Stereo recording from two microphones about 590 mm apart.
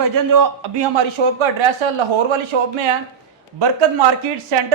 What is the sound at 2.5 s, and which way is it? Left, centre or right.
Speech, right.